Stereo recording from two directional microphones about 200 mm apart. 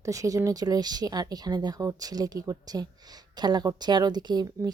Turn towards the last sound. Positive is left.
turn(degrees=-20)  # may be behind; listen again after turning